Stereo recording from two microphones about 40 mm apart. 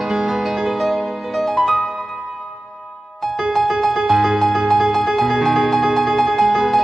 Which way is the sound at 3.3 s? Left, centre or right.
Centre.